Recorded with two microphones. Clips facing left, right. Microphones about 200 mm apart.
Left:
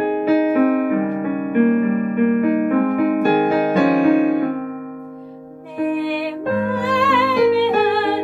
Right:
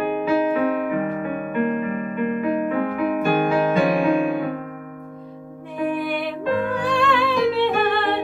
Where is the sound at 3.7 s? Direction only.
55° left (ahead or behind).